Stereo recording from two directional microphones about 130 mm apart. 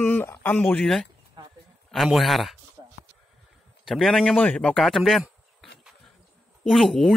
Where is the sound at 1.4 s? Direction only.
35° right (ahead or behind).